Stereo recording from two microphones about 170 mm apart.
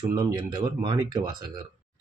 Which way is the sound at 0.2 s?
25° right (ahead or behind).